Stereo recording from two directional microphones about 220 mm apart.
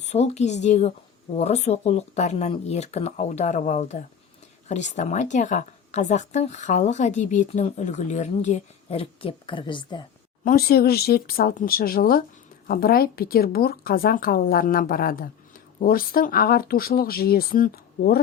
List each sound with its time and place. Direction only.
0.0 s speech: 30° left (ahead or behind)
10.4 s speech: 45° left (ahead or behind)